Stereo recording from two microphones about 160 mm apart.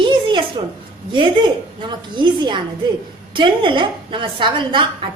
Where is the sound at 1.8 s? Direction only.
30° right (ahead or behind).